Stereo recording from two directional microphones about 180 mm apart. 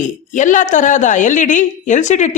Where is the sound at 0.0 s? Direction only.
45° left (ahead or behind).